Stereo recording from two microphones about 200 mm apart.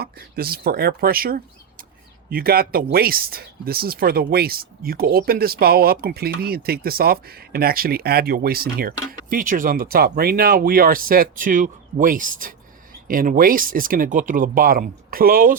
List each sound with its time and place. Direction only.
0.0 s speech: 50° right (ahead or behind)